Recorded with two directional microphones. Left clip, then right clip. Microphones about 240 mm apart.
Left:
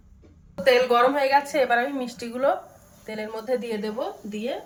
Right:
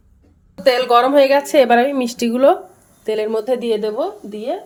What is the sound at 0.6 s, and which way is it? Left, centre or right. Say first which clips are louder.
Speech: right 5 dB; right.